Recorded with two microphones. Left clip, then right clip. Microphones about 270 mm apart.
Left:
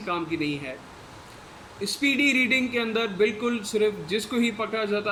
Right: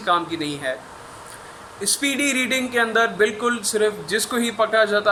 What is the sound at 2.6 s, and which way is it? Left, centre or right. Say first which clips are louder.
A man's voice: right 7 dB; right.